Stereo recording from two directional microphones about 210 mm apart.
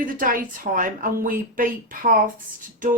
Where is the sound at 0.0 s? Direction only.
40° right (ahead or behind).